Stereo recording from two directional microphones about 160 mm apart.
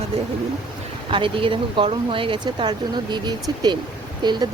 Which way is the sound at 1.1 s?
30° right (ahead or behind).